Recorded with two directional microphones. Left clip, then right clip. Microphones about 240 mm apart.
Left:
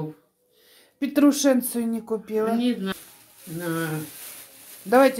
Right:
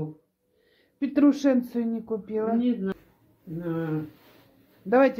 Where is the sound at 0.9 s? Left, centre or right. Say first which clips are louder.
Left 2 dB; centre.